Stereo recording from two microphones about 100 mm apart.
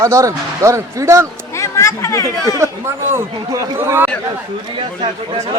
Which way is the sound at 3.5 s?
40° right (ahead or behind).